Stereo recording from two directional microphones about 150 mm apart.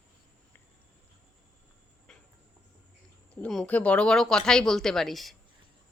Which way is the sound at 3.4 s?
5° left (ahead or behind).